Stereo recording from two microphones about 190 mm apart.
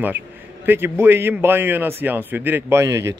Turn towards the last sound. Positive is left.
turn(degrees=-15)  # may be behind; listen again after turning